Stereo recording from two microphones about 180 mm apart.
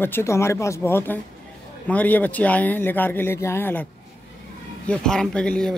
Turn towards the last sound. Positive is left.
turn(degrees=5)  # may be behind; listen again after turning